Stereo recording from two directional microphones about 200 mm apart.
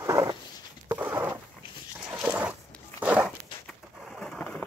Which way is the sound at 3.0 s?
5° right (ahead or behind).